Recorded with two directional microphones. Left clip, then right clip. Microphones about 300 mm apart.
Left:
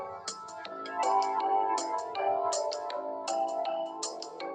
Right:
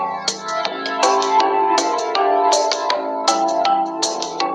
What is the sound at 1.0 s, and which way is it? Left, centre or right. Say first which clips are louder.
Music: right 12 dB; right.